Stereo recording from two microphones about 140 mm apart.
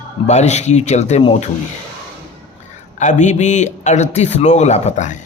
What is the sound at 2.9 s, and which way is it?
A man's voice, 60° left (ahead or behind).